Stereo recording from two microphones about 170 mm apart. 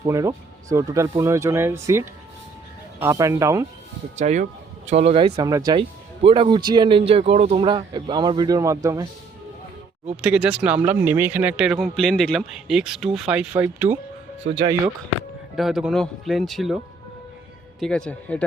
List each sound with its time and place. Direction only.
0.1 s speech: 20° right (ahead or behind)
4.2 s speech: 45° right (ahead or behind); by 5.8 s 20° right (ahead or behind)
6.2 s speech: 35° right (ahead or behind)
10.2 s speech: 5° right (ahead or behind)
15.5 s speech: centre (ahead or behind)